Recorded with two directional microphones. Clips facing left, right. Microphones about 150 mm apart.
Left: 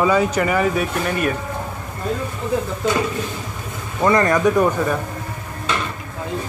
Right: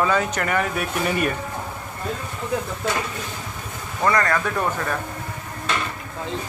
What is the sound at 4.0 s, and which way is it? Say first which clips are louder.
A man's voice: left 5 dB; 20° left (ahead or behind).